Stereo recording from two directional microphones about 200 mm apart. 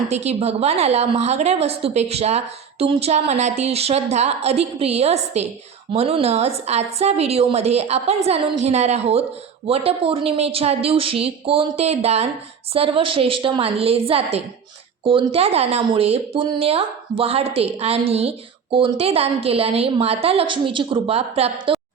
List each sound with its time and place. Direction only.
0.3 s a woman's voice: 30° right (ahead or behind)